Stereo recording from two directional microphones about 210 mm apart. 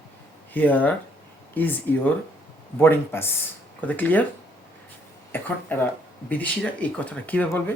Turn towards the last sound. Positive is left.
turn(degrees=10)  # may be behind; listen again after turning